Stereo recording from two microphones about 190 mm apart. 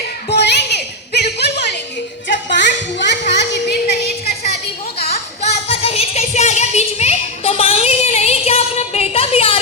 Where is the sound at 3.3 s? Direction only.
60° left (ahead or behind).